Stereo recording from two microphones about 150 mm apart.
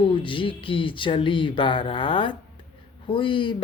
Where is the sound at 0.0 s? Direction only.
35° left (ahead or behind).